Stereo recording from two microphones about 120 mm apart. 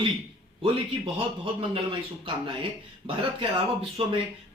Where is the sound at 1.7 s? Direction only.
45° right (ahead or behind).